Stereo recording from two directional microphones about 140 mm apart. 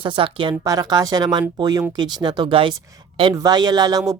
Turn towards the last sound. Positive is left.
turn(degrees=-30)  # may be behind; listen again after turning